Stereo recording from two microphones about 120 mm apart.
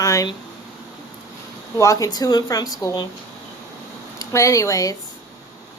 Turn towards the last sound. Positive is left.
turn(degrees=30)  # may be behind; listen again after turning